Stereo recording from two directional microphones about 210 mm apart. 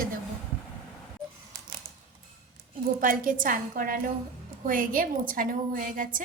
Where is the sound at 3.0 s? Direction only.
40° right (ahead or behind).